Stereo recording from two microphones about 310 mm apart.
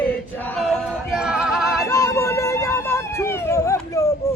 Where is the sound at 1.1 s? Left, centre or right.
Centre.